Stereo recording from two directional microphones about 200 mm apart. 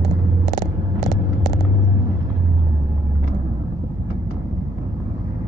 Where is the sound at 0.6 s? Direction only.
20° left (ahead or behind).